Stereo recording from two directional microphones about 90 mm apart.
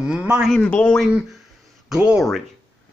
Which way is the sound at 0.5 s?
15° left (ahead or behind).